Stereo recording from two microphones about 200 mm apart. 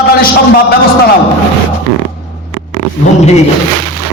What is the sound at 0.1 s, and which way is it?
Speech, 50° left (ahead or behind).